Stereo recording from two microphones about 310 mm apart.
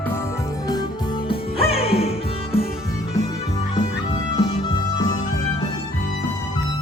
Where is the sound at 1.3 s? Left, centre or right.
Centre.